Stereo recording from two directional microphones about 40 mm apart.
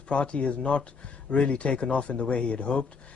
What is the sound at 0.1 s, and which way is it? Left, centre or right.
A man's voice, left.